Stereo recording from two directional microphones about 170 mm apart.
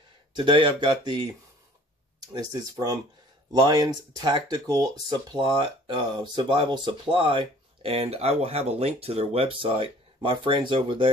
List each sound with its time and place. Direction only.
0.4 s speech: 30° right (ahead or behind)
2.3 s speech: 20° right (ahead or behind)